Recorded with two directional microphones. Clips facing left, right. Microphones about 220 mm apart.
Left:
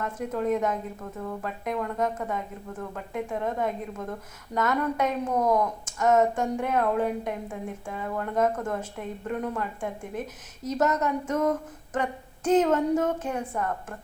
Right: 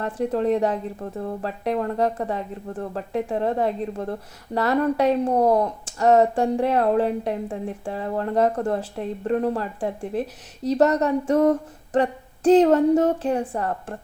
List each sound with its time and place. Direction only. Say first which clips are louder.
0.0 s speech: right 6 dB; 35° right (ahead or behind)